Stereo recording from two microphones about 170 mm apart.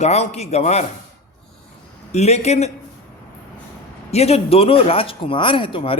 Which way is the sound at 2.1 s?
40° left (ahead or behind).